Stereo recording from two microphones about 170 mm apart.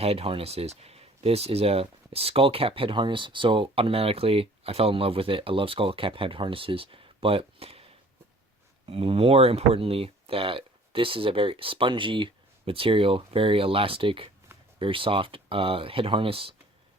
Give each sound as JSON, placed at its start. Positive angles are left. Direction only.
{"t": 0.0, "sound": "speech", "side_deg": -35}